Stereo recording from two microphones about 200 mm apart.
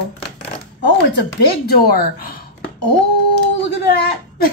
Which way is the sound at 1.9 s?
50° left (ahead or behind).